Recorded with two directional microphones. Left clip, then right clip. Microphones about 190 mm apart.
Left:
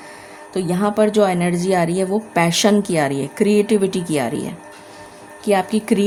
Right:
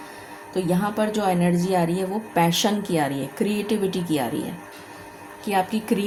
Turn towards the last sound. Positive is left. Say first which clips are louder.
# left 5 dB
turn(degrees=45)  # may be behind; listen again after turning